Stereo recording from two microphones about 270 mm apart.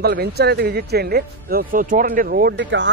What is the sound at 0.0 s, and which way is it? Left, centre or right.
Speech, right.